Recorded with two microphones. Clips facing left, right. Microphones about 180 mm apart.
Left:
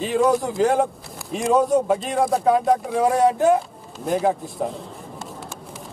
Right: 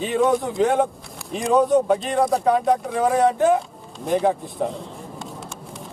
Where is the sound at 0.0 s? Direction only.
Centre (ahead or behind).